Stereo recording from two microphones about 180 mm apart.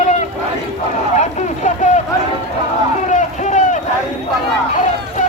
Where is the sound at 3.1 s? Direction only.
40° left (ahead or behind).